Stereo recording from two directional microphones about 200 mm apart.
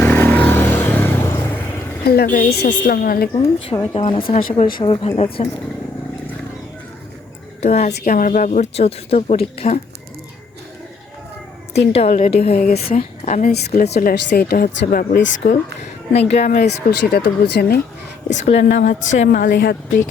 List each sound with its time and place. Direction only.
0.0 s vehicle: 10° left (ahead or behind)
2.0 s a woman's voice: 45° left (ahead or behind)
3.3 s speech: 25° left (ahead or behind)
7.6 s a woman's voice: 35° left (ahead or behind)
11.7 s a woman's voice: 30° left (ahead or behind)
13.5 s a woman's voice: 55° left (ahead or behind)
15.4 s a woman's voice: 35° left (ahead or behind)
16.6 s speech: 55° left (ahead or behind)
18.3 s a woman's voice: 35° left (ahead or behind); by 20.0 s 50° left (ahead or behind)